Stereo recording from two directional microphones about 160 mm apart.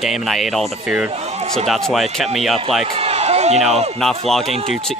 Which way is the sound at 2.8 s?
40° right (ahead or behind).